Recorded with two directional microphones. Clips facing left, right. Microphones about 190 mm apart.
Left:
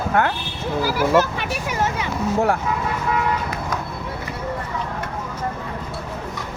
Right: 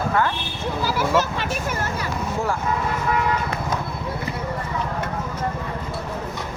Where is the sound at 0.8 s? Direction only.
10° left (ahead or behind).